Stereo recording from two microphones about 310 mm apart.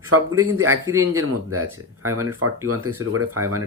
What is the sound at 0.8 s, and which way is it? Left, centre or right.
Speech, centre.